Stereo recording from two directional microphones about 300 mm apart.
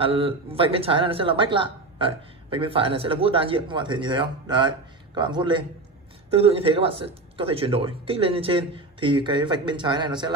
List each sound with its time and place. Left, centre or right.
0.0 s speech: centre